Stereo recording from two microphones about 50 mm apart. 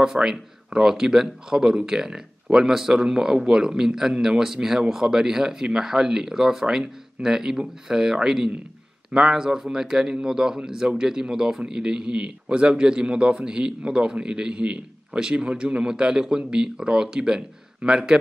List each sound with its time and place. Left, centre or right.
0.0 s a man's voice: centre